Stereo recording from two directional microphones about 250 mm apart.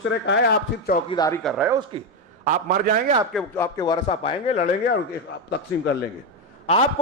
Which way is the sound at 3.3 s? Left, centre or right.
Centre.